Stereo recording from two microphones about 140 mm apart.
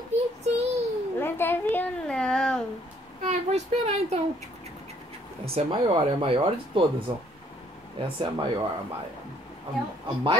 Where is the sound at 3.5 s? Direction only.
50° right (ahead or behind).